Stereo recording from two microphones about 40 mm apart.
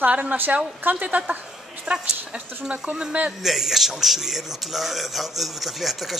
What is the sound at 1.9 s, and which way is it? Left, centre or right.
Speech, right.